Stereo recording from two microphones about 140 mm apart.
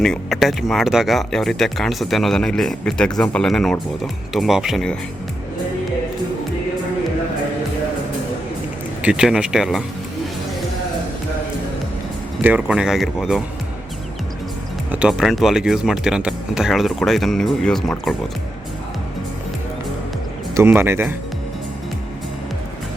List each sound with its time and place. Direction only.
0.0 s speech: centre (ahead or behind)
9.0 s speech: 5° right (ahead or behind)
12.4 s speech: 10° right (ahead or behind)
14.9 s speech: 5° right (ahead or behind)
20.6 s speech: 15° right (ahead or behind)